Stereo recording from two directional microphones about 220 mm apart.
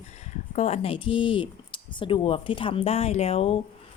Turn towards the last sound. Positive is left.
turn(degrees=25)  # may be behind; listen again after turning